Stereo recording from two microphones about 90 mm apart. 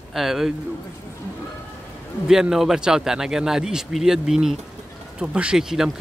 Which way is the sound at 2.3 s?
5° right (ahead or behind).